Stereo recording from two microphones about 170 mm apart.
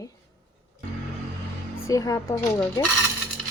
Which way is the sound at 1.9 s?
20° left (ahead or behind).